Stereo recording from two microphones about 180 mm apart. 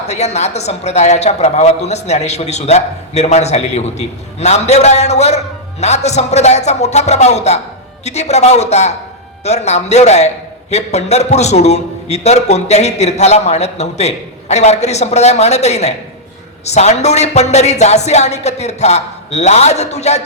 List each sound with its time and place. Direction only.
0.1 s a man's voice: 35° left (ahead or behind)